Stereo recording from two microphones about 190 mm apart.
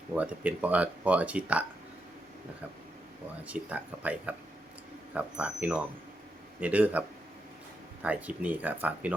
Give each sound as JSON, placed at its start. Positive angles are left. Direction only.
{"t": 0.1, "sound": "speech", "side_deg": -10}
{"t": 3.4, "sound": "speech", "side_deg": -10}
{"t": 8.0, "sound": "speech", "side_deg": -5}